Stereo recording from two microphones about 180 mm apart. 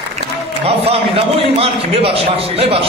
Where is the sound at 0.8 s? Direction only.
35° right (ahead or behind).